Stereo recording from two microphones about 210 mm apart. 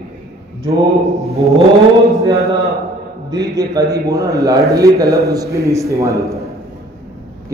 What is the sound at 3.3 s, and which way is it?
A man's voice, 20° right (ahead or behind).